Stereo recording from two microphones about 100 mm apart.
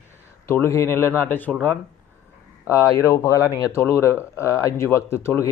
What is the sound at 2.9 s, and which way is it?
Speech, 30° left (ahead or behind).